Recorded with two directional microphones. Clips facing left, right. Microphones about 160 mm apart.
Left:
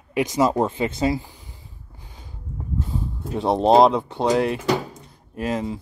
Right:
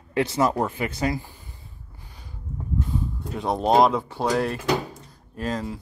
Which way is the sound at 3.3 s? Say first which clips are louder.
Left 4 dB; 30° left (ahead or behind).